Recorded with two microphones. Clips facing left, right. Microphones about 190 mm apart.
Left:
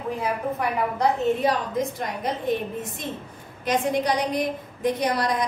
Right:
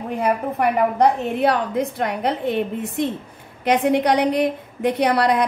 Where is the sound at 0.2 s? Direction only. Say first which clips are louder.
Right 8 dB; 65° right (ahead or behind).